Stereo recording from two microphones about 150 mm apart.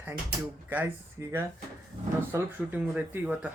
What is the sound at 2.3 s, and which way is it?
Speech, 10° right (ahead or behind).